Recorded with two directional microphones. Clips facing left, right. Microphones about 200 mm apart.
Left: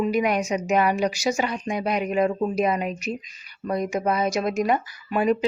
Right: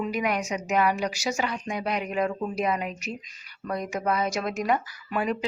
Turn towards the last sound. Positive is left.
turn(degrees=20)  # may be behind; listen again after turning